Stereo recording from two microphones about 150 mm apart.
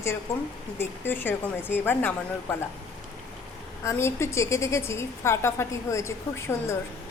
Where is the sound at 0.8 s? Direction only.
15° left (ahead or behind).